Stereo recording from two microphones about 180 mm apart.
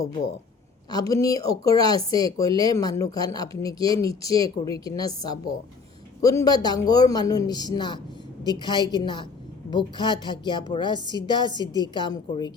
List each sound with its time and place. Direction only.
0.9 s a woman's voice: 20° left (ahead or behind)